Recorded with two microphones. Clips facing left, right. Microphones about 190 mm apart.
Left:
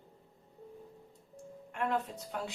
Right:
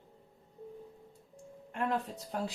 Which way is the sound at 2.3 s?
40° right (ahead or behind).